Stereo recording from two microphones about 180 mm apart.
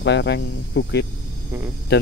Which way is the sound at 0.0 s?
75° left (ahead or behind).